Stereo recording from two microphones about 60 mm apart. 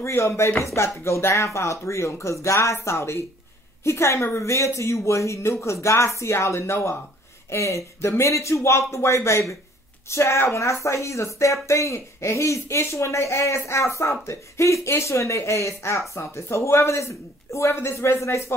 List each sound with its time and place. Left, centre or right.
0.0 s speech: left